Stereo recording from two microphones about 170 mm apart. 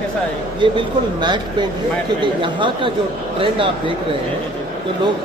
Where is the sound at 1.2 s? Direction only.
25° right (ahead or behind).